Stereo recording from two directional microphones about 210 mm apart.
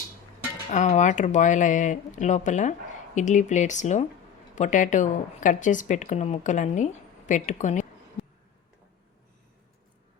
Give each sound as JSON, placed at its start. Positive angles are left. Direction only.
{"t": 0.7, "sound": "a woman's voice", "side_deg": 35}